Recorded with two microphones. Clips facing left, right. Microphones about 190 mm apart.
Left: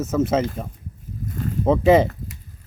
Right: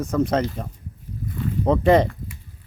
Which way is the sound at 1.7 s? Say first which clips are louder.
Left 2 dB; 5° left (ahead or behind).